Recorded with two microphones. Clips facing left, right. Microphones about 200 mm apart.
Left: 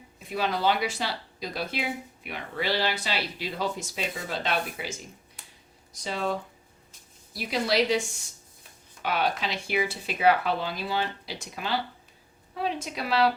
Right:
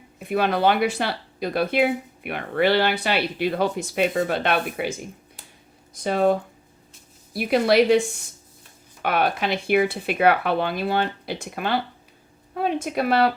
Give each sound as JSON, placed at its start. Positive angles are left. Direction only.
{"t": 0.2, "sound": "a woman's voice", "side_deg": -60}